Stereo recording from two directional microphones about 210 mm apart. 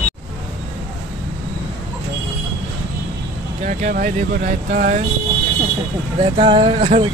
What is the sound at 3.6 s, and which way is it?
Speech, 40° right (ahead or behind).